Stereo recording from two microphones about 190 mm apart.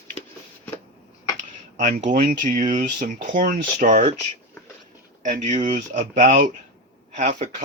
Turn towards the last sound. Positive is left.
turn(degrees=-35)  # may be behind; listen again after turning